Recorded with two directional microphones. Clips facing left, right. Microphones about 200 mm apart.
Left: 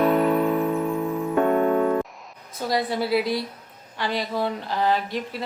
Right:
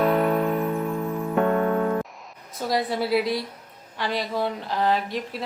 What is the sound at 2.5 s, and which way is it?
Speech, centre (ahead or behind).